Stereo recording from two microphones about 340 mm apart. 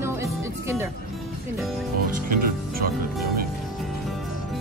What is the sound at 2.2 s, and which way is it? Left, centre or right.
Music, right.